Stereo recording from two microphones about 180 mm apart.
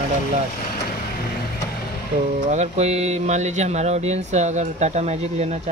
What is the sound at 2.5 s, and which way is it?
Speech, 35° right (ahead or behind).